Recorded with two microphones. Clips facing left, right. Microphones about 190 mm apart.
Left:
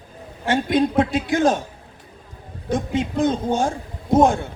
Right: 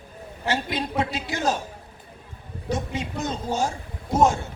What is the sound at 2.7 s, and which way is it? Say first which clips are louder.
A man's voice: left 6 dB; 55° left (ahead or behind).